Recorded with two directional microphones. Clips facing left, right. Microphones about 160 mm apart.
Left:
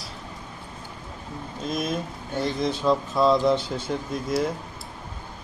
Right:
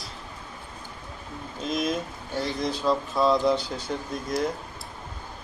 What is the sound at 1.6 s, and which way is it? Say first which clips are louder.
Speech: right 1 dB; centre (ahead or behind).